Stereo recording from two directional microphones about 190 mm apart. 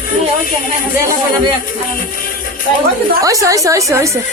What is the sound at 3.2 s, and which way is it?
Speech, 15° right (ahead or behind).